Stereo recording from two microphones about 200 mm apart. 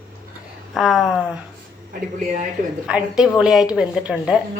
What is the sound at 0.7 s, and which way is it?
Speech, centre (ahead or behind).